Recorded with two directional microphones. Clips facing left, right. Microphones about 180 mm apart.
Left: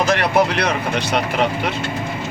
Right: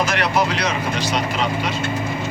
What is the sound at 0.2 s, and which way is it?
Speech, 60° left (ahead or behind).